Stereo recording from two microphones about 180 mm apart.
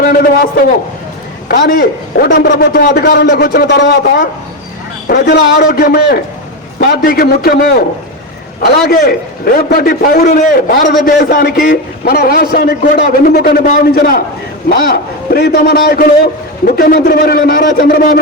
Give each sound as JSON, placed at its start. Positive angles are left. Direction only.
{"t": 0.0, "sound": "a man's voice", "side_deg": 55}
{"t": 1.5, "sound": "a man's voice", "side_deg": 55}